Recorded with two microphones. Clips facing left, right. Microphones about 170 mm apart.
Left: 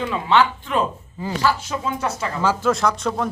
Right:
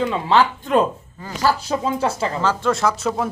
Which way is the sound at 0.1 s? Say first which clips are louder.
Right 1 dB; 35° right (ahead or behind).